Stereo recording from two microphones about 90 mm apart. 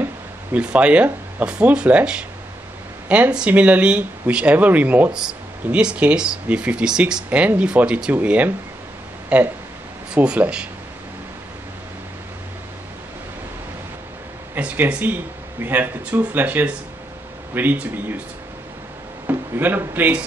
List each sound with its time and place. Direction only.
0.0 s speech: 15° right (ahead or behind)
5.1 s speech: 10° right (ahead or behind)
14.5 s speech: 20° right (ahead or behind)
19.2 s speech: 25° right (ahead or behind)